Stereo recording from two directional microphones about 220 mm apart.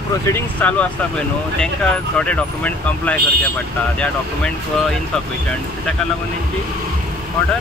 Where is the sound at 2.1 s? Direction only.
5° left (ahead or behind).